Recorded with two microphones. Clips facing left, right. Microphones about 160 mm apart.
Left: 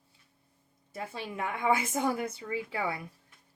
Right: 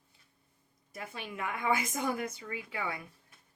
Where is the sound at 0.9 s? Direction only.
30° left (ahead or behind).